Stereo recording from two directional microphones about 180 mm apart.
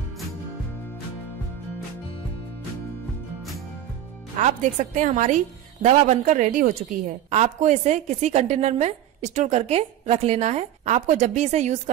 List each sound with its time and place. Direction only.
4.4 s a woman's voice: 40° right (ahead or behind)